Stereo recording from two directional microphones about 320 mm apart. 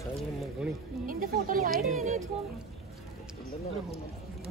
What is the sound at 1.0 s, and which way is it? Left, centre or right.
Speech, right.